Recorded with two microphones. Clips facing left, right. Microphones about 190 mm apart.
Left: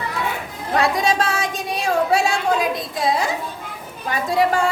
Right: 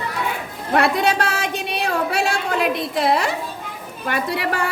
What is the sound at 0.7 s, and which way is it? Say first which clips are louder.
A woman's voice: right 1 dB; 60° right (ahead or behind).